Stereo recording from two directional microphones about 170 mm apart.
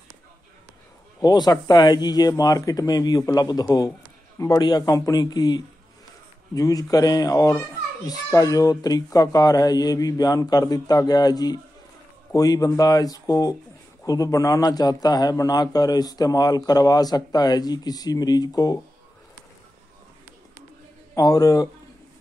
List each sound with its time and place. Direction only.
1.2 s a man's voice: 25° left (ahead or behind)
21.1 s speech: 20° left (ahead or behind)